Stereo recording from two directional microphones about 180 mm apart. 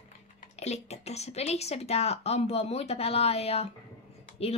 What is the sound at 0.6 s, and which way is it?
A woman's voice, 40° left (ahead or behind).